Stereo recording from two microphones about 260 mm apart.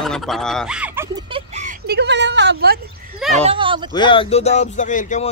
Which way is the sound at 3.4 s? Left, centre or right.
Right.